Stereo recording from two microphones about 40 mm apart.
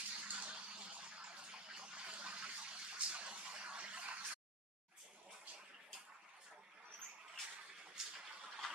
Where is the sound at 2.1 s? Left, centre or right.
Right.